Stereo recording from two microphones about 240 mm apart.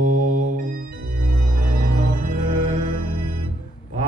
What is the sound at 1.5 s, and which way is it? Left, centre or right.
Music, right.